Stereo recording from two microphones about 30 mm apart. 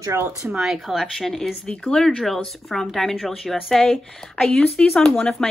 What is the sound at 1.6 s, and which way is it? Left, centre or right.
Speech, left.